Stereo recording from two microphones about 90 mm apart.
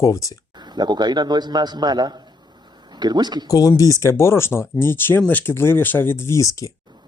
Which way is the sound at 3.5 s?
40° left (ahead or behind).